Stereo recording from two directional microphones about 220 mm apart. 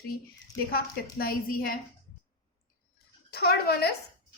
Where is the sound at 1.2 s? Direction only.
40° left (ahead or behind).